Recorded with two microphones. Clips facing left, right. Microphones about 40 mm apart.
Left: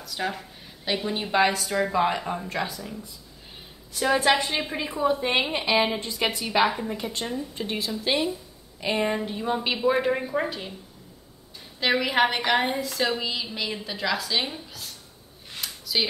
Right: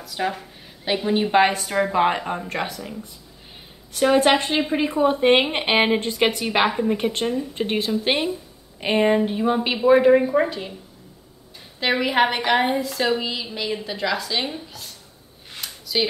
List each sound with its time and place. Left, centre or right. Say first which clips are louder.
0.0 s a woman's voice: right 4 dB; centre
1.3 s a woman's voice: right 2 dB; right
3.9 s a woman's voice: right 5 dB; right
9.4 s a woman's voice: right 5 dB; centre
11.8 s a woman's voice: right 3 dB; centre
15.6 s a sound: right 3 dB; centre